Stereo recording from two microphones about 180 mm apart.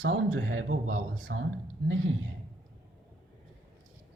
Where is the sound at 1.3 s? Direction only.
70° right (ahead or behind).